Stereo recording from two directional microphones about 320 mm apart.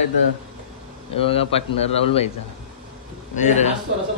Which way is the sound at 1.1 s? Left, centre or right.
Centre.